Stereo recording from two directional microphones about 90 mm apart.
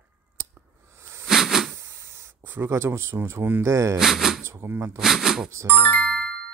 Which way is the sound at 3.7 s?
35° right (ahead or behind).